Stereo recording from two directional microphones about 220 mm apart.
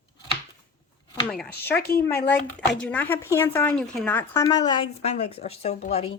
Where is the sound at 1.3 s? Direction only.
5° left (ahead or behind).